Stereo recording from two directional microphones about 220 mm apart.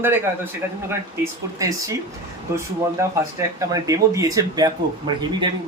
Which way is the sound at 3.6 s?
15° right (ahead or behind).